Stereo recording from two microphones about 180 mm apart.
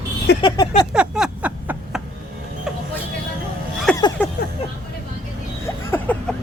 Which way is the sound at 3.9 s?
5° left (ahead or behind).